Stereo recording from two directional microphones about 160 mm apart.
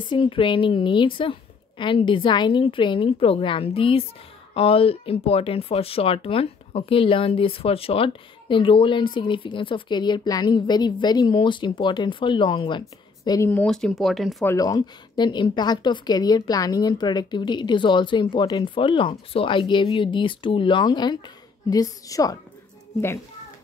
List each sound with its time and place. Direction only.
0.1 s speech: 30° left (ahead or behind); by 13.7 s 15° left (ahead or behind)
13.7 s speech: 5° left (ahead or behind)
14.4 s a woman's voice: 20° left (ahead or behind)